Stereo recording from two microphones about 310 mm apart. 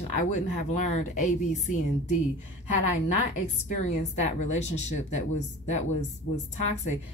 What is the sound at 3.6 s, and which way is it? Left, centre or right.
A woman's voice, left.